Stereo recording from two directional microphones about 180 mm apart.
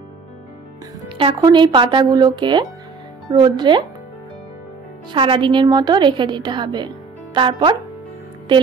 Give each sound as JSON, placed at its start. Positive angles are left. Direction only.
{"t": 1.0, "sound": "a woman's voice", "side_deg": -30}
{"t": 5.1, "sound": "a woman's voice", "side_deg": -30}